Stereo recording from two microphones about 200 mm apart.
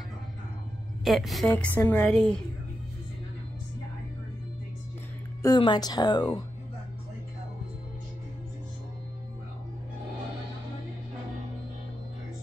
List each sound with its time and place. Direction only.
1.0 s a woman's voice: centre (ahead or behind)
5.4 s speech: 20° left (ahead or behind)